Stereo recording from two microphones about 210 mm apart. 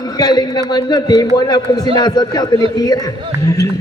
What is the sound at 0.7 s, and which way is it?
A man's voice, 20° left (ahead or behind).